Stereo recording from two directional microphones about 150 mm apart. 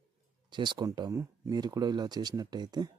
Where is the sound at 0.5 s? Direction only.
30° right (ahead or behind).